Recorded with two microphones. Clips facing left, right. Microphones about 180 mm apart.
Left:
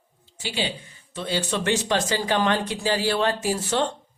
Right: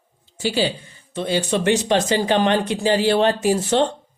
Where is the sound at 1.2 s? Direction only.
15° right (ahead or behind).